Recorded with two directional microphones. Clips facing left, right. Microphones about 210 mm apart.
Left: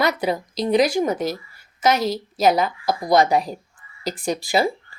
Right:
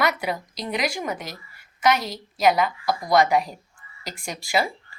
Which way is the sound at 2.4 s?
30° left (ahead or behind).